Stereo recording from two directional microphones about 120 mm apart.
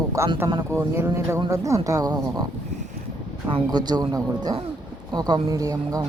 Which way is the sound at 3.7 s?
35° right (ahead or behind).